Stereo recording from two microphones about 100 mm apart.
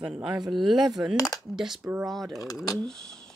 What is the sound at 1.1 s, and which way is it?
Speech, 35° left (ahead or behind).